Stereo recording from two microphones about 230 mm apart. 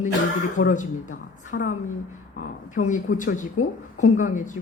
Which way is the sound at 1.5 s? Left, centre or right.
Left.